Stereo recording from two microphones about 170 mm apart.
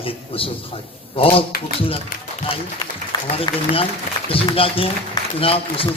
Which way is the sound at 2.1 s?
55° left (ahead or behind).